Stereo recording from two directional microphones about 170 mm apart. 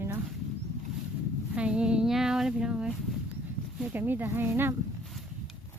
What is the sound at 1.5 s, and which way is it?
Speech, 5° right (ahead or behind).